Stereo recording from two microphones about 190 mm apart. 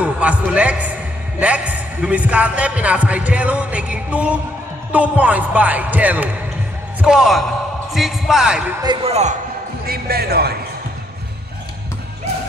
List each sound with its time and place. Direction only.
0.0 s a man's voice: 5° right (ahead or behind)
8.8 s speech: 35° right (ahead or behind)
9.8 s speech: 55° right (ahead or behind)